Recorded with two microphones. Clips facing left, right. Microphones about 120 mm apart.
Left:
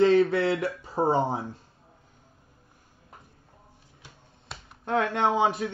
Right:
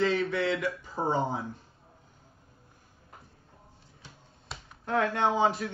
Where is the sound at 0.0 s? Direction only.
35° left (ahead or behind).